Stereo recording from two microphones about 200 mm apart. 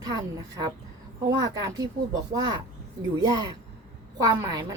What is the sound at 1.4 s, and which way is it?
A woman's voice, 20° right (ahead or behind).